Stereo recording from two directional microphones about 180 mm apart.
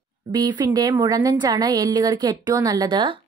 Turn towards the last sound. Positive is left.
turn(degrees=-25)  # may be behind; listen again after turning